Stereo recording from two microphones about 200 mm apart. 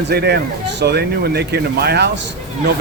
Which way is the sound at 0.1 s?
55° right (ahead or behind).